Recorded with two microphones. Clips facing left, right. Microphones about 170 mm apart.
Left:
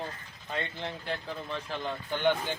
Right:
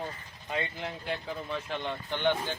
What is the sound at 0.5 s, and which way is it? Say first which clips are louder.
Speech: right 1 dB; 5° right (ahead or behind).